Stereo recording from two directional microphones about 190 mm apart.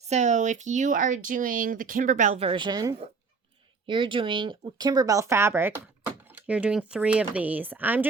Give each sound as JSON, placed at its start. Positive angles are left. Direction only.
{"t": 0.0, "sound": "speech", "side_deg": -35}